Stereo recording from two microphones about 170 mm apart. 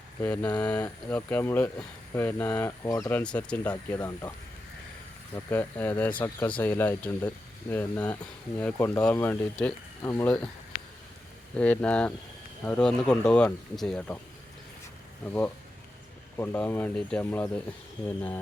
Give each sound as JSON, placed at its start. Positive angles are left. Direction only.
{"t": 0.2, "sound": "speech", "side_deg": 10}
{"t": 3.9, "sound": "speech", "side_deg": 20}
{"t": 5.3, "sound": "speech", "side_deg": 10}
{"t": 11.5, "sound": "speech", "side_deg": 5}
{"t": 15.3, "sound": "speech", "side_deg": 10}